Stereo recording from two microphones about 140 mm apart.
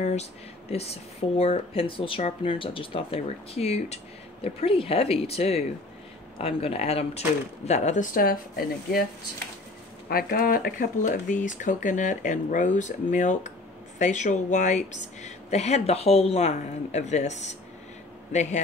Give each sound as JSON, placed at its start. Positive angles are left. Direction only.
{"t": 0.0, "sound": "speech", "side_deg": 50}
{"t": 10.1, "sound": "speech", "side_deg": 85}